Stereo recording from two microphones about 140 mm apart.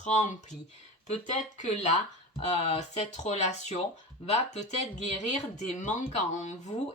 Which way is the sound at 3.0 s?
55° left (ahead or behind).